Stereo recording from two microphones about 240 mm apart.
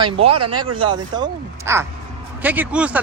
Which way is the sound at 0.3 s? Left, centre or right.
Right.